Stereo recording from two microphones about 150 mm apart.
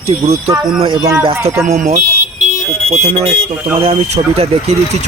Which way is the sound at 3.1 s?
45° right (ahead or behind).